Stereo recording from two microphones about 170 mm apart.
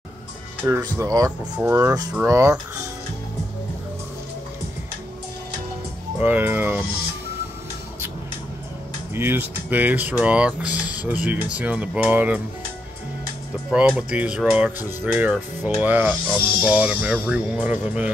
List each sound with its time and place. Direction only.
0.7 s speech: 15° right (ahead or behind)
6.1 s speech: 10° right (ahead or behind)
9.1 s speech: 10° right (ahead or behind)
13.7 s speech: 5° right (ahead or behind)